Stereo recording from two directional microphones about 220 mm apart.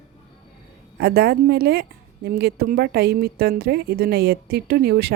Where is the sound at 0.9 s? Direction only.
45° right (ahead or behind).